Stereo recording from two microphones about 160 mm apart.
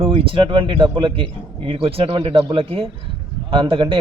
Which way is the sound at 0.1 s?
35° right (ahead or behind).